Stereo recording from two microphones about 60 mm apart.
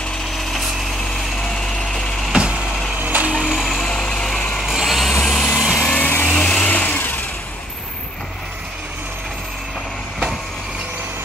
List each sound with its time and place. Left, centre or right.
1.4 s a sound: centre
2.3 s vehicle: centre
3.0 s a sound: right
3.4 s a sound: centre
3.8 s vehicle: centre
4.6 s vehicle: centre
5.2 s vehicle: centre
5.6 s vehicle: centre
5.9 s vehicle: left
6.3 s vehicle: centre
6.7 s vehicle: left